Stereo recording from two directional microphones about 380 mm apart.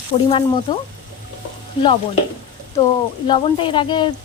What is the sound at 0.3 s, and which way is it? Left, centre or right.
Speech, centre.